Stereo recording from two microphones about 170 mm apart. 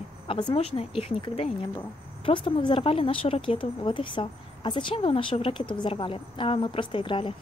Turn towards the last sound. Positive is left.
turn(degrees=30)  # may be behind; listen again after turning